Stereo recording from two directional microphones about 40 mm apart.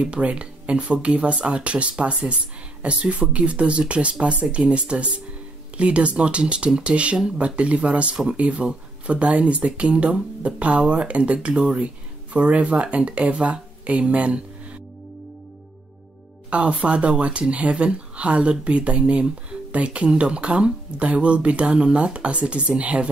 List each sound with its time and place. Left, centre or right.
0.0 s speech: right
16.4 s speech: right